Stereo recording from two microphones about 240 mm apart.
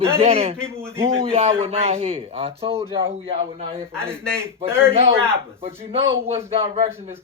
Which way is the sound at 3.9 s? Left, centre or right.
Centre.